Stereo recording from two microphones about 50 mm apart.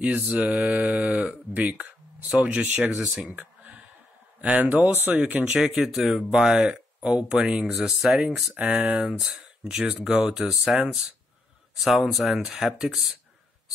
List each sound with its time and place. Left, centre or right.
0.0 s mantra: right
1.5 s speech: right
3.0 s mantra: centre
3.3 s a sound: right
4.4 s speech: right
5.4 s mantra: right
5.9 s speech: centre
8.6 s mantra: right
9.0 s speech: centre